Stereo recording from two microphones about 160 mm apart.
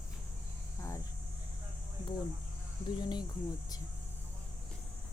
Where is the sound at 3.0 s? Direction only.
25° left (ahead or behind).